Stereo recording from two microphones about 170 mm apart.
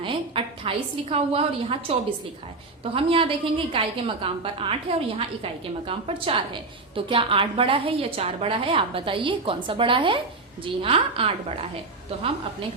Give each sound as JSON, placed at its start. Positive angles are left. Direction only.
{"t": 0.0, "sound": "a woman's voice", "side_deg": -30}